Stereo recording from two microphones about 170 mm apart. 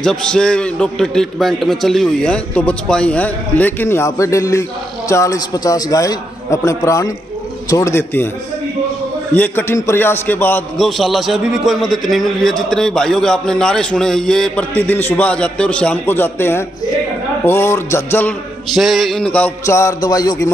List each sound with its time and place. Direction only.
0.0 s a man's voice: 5° left (ahead or behind)
9.3 s a man's voice: 10° left (ahead or behind)
18.7 s a man's voice: centre (ahead or behind)
19.6 s a sound: 15° left (ahead or behind)